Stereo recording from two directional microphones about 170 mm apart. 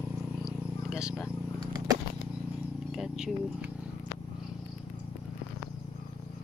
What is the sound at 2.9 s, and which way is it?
Speech, centre (ahead or behind).